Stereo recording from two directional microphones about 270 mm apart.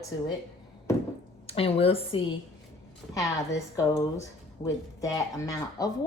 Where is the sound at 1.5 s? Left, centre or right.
Left.